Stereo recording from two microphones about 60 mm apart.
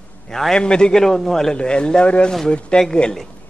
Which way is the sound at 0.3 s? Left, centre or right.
Centre.